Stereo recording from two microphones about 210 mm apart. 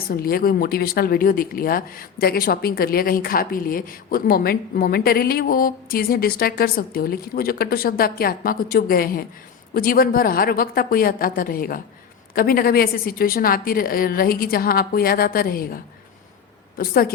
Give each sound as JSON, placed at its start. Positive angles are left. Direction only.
{"t": 0.1, "sound": "speech", "side_deg": 45}